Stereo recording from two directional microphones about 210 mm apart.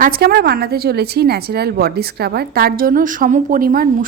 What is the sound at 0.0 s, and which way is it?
A woman's voice, 50° right (ahead or behind).